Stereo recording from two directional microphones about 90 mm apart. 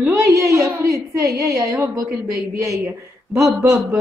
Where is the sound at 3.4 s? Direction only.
35° right (ahead or behind).